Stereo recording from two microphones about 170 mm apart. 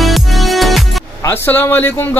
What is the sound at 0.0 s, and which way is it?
Music, centre (ahead or behind).